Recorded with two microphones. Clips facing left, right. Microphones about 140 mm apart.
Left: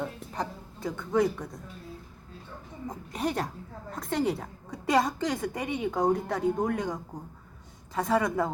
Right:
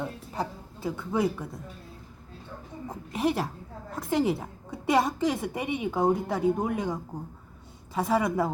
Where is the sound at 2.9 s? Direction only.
5° right (ahead or behind).